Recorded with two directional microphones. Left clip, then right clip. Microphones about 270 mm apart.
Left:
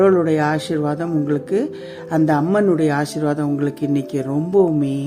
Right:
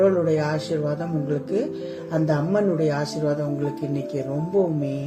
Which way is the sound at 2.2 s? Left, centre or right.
Left.